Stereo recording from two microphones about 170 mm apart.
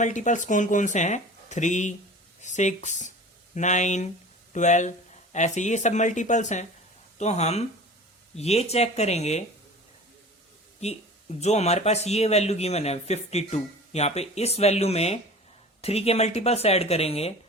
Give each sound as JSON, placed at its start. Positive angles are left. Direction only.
{"t": 0.0, "sound": "speech", "side_deg": 45}
{"t": 10.8, "sound": "speech", "side_deg": 40}